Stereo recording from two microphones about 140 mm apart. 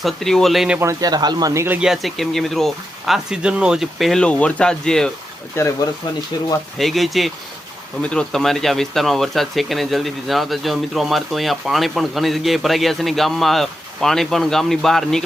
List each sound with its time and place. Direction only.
0.0 s speech: centre (ahead or behind)
0.8 s speech: 25° right (ahead or behind)
1.6 s speech: 10° right (ahead or behind)
5.6 s speech: 15° left (ahead or behind)
6.7 s speech: centre (ahead or behind)